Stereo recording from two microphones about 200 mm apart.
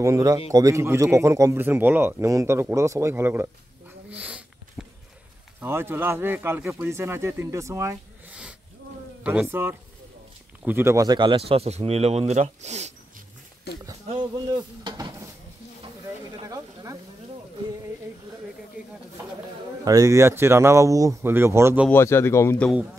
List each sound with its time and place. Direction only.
0.0 s speech: 15° right (ahead or behind)
4.1 s sniff: 5° right (ahead or behind)
5.6 s speech: 10° right (ahead or behind); by 12.9 s 35° right (ahead or behind)
13.7 s speech: 55° left (ahead or behind)
14.0 s speech: 20° right (ahead or behind)
16.3 s snake: 15° right (ahead or behind)
19.8 s speech: 15° right (ahead or behind)
21.8 s speech: 10° left (ahead or behind)